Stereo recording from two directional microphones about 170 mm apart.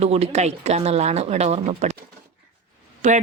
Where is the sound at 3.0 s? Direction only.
45° right (ahead or behind).